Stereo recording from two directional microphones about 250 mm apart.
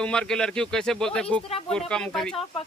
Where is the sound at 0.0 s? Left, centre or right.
Centre.